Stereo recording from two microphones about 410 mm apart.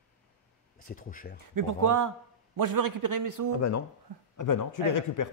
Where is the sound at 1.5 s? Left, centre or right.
Right.